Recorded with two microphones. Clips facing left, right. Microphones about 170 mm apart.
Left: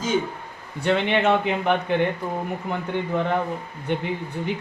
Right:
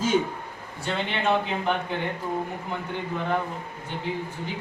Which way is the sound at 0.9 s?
65° left (ahead or behind).